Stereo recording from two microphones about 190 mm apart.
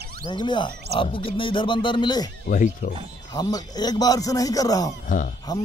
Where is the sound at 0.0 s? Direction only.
55° right (ahead or behind).